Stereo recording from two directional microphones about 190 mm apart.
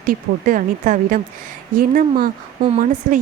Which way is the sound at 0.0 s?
45° right (ahead or behind).